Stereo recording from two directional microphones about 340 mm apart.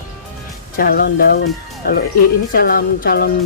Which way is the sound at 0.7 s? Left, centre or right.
Left.